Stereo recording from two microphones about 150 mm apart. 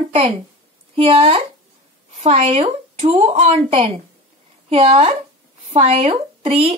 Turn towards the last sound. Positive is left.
turn(degrees=-40)  # may be behind; listen again after turning